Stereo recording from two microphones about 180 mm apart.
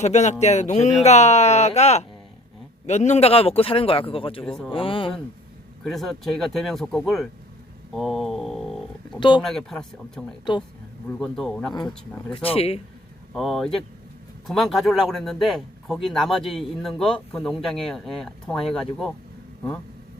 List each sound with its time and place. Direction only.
0.0 s a man's voice: 40° left (ahead or behind)
4.4 s speech: 5° left (ahead or behind)
4.7 s speech: 30° left (ahead or behind)
5.8 s speech: centre (ahead or behind)
7.9 s a sound: centre (ahead or behind)
9.4 s speech: centre (ahead or behind)
10.5 s speech: 25° left (ahead or behind)
11.2 s speech: 5° left (ahead or behind)
12.3 s a man's voice: 30° left (ahead or behind)
13.3 s speech: centre (ahead or behind)